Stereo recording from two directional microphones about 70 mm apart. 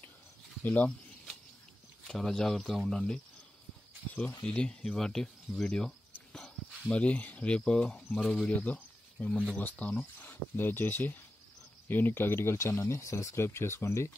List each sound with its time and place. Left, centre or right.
0.7 s speech: left
2.0 s speech: centre
4.5 s speech: centre
8.5 s a sound: left
9.3 s speech: centre
9.6 s speech: left